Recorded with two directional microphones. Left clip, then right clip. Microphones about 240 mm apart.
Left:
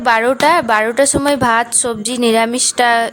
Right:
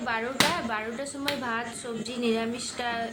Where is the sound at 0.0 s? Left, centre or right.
Left.